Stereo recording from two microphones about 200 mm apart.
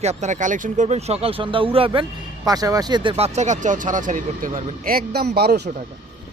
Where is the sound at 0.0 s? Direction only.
35° right (ahead or behind); by 5.7 s 55° right (ahead or behind).